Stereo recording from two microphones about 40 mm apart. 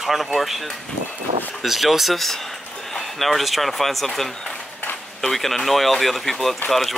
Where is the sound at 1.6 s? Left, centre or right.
Centre.